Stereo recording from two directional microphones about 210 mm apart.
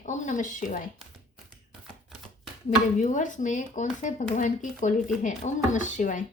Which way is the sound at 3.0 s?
35° left (ahead or behind).